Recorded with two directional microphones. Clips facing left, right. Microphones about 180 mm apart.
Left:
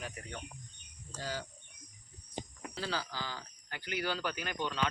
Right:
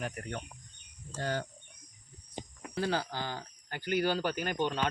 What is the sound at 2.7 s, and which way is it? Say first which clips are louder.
Speech: right 6 dB; 55° right (ahead or behind).